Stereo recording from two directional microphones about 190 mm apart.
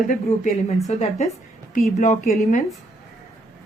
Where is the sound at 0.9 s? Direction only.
35° left (ahead or behind).